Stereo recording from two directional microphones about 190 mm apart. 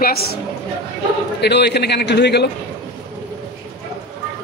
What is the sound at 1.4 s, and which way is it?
Speech, 60° left (ahead or behind).